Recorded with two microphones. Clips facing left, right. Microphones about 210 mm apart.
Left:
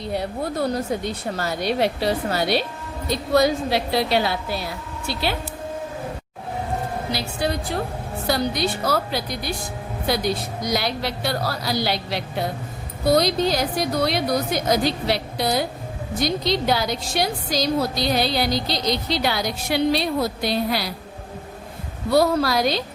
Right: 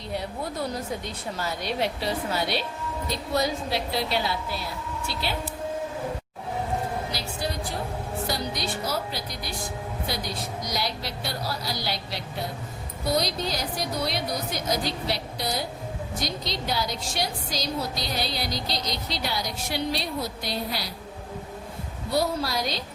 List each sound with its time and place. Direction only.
0.1 s speech: 65° left (ahead or behind)
8.3 s a woman's voice: 60° left (ahead or behind)
22.1 s speech: 85° left